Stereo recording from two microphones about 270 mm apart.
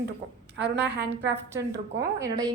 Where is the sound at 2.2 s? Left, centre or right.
Centre.